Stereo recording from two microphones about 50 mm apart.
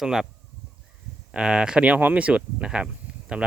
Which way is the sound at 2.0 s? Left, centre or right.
Right.